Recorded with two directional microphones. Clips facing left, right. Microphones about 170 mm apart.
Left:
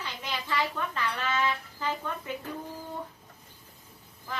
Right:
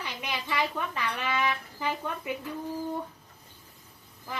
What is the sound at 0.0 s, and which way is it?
Speech, 15° right (ahead or behind).